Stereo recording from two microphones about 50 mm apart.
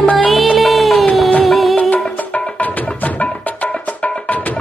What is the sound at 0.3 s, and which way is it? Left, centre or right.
Music, centre.